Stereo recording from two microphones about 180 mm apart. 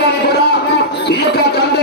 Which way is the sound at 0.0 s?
65° left (ahead or behind).